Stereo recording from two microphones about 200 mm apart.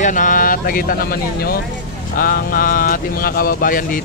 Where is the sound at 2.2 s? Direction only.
45° left (ahead or behind).